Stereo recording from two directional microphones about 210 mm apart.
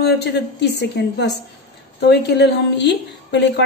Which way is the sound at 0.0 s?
50° left (ahead or behind).